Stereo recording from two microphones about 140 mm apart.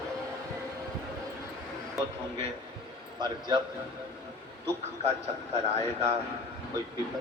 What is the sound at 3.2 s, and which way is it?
Speech, 30° right (ahead or behind).